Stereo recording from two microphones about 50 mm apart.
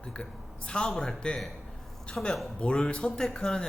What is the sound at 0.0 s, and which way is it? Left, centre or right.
A woman's voice, left.